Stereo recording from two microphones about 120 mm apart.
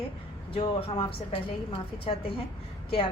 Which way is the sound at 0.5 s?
50° left (ahead or behind).